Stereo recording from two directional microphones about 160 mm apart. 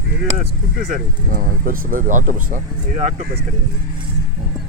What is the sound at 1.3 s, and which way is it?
Speech, 55° right (ahead or behind).